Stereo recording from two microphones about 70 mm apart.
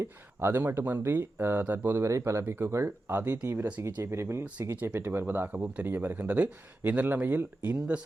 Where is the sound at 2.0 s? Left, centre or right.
Right.